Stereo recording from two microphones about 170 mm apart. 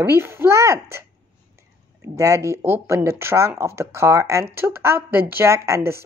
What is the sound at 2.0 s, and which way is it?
Speech, 20° right (ahead or behind).